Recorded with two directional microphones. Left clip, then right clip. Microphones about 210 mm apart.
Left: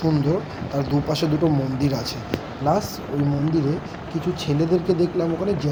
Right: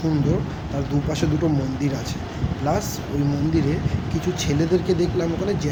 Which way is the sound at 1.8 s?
20° left (ahead or behind).